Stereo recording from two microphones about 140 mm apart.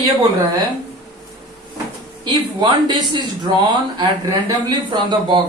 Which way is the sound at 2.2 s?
35° right (ahead or behind).